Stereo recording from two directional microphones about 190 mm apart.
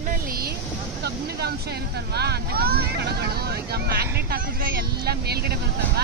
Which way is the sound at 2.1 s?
55° right (ahead or behind).